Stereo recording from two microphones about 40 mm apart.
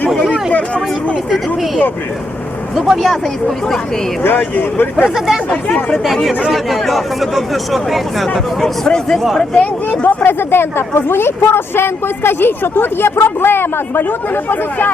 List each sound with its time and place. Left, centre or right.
0.5 s speech: left
2.8 s speech: centre
4.2 s speech: left
5.0 s speech: centre
5.5 s speech: left
6.5 s speech: centre
8.3 s speech: centre
9.6 s speech: left
10.2 s a woman's voice: left